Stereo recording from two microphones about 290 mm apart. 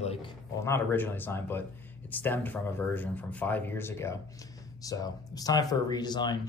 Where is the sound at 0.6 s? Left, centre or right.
Centre.